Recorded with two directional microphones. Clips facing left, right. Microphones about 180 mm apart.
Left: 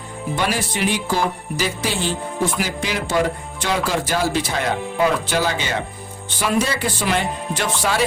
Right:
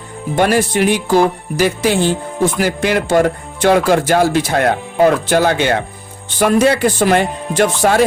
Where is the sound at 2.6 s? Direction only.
60° right (ahead or behind).